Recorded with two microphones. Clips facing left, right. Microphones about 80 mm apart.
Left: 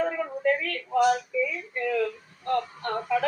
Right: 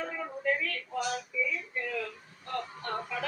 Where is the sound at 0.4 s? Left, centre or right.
Left.